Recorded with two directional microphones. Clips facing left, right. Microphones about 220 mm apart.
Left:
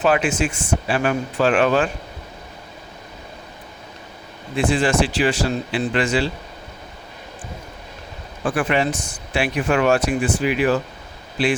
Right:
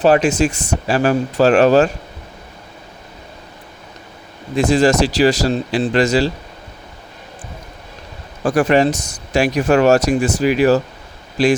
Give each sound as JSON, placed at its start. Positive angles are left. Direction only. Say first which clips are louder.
{"t": 0.0, "sound": "speech", "louder": "right 6 dB", "side_deg": -40}
{"t": 4.5, "sound": "speech", "louder": "right 5 dB", "side_deg": -40}
{"t": 8.4, "sound": "speech", "louder": "right 6 dB", "side_deg": -40}